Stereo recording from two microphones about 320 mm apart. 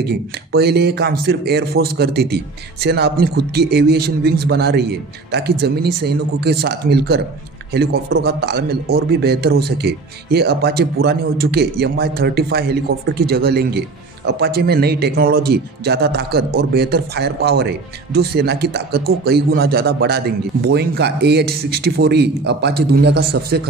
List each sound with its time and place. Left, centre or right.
0.0 s a man's voice: right